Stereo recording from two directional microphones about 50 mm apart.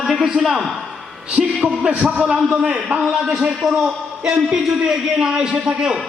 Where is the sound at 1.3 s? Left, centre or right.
Right.